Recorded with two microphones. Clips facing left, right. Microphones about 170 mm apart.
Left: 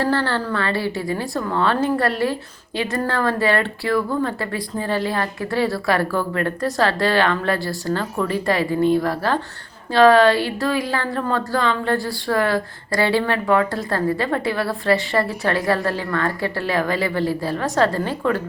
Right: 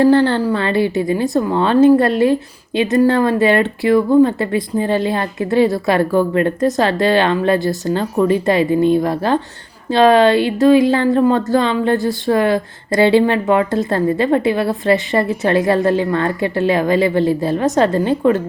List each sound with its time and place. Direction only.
0.0 s speech: 20° right (ahead or behind)